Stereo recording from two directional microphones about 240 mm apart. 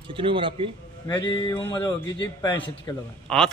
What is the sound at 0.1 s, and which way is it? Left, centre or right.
Speech, right.